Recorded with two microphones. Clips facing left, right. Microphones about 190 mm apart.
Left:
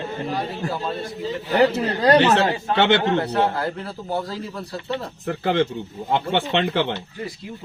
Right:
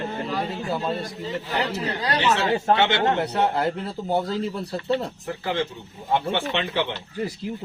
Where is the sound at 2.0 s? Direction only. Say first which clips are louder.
Left 12 dB; 50° left (ahead or behind).